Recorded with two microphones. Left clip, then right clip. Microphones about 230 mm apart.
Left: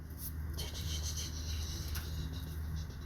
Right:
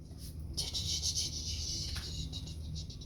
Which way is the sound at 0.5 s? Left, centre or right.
Right.